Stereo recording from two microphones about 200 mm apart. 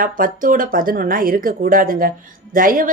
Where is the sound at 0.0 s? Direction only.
45° right (ahead or behind).